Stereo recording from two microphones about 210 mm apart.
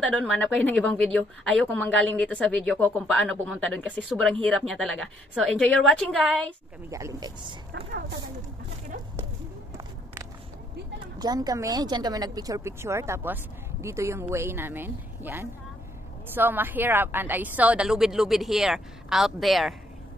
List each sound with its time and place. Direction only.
0.0 s speech: 5° left (ahead or behind)
6.9 s speech: 15° right (ahead or behind)
7.7 s speech: 50° right (ahead or behind)
11.1 s speech: 20° right (ahead or behind); by 19.7 s centre (ahead or behind)